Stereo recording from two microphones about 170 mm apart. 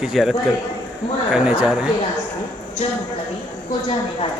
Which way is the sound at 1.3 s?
5° right (ahead or behind).